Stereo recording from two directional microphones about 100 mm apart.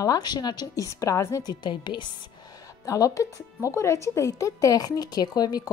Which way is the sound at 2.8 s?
35° left (ahead or behind).